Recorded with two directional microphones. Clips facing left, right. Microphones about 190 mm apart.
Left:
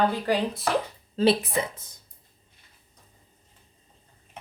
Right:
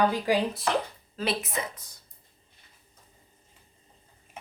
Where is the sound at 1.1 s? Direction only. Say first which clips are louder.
Left 8 dB; 30° left (ahead or behind).